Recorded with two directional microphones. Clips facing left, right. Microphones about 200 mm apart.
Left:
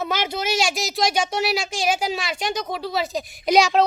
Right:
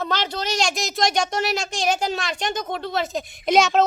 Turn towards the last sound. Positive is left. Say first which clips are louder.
# left 1 dB
turn(degrees=0)  # may be behind; listen again after turning